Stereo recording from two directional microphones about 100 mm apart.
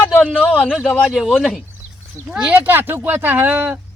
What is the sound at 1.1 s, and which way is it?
Speech, centre (ahead or behind).